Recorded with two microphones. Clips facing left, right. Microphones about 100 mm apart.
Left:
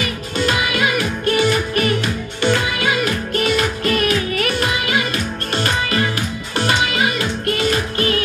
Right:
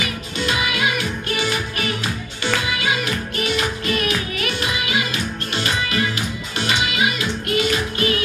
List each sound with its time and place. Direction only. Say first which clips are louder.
0.5 s music: left 2 dB; 50° left (ahead or behind)
3.3 s music: left 5 dB; 45° left (ahead or behind)